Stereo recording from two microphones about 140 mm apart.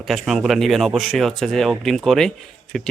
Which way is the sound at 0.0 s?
Centre (ahead or behind).